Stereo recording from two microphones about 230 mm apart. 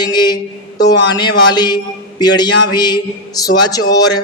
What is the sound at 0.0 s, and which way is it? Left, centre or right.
A man's voice, centre.